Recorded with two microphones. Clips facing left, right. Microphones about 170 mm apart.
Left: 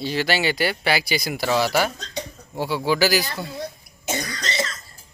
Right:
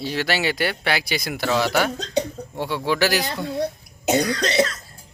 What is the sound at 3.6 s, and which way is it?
Cough, 65° right (ahead or behind).